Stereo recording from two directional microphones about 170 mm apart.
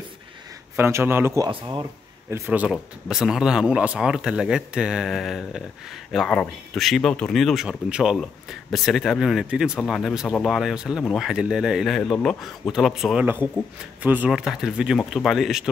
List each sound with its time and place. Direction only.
0.7 s speech: 15° right (ahead or behind)
1.5 s speech: 25° right (ahead or behind)
2.3 s speech: 10° right (ahead or behind)